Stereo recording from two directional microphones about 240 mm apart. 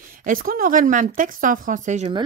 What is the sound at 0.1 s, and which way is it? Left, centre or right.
Speech, right.